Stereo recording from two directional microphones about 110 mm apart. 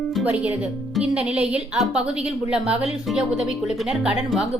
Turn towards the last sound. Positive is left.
turn(degrees=-5)  # may be behind; listen again after turning